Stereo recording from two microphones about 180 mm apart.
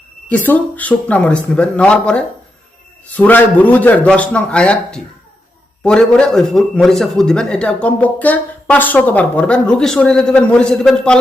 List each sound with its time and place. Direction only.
0.3 s a man's voice: 10° left (ahead or behind)